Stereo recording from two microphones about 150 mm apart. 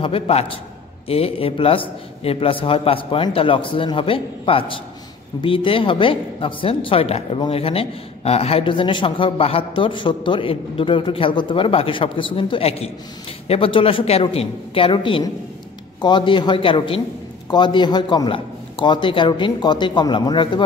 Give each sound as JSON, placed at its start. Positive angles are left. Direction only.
{"t": 0.0, "sound": "a man's voice", "side_deg": 40}